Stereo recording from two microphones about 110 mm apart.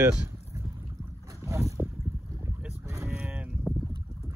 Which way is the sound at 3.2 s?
10° right (ahead or behind).